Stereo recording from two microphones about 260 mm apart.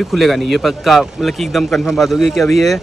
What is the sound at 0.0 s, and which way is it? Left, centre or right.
Speech, centre.